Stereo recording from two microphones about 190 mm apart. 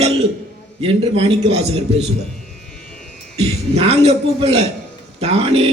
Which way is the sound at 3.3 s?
35° right (ahead or behind).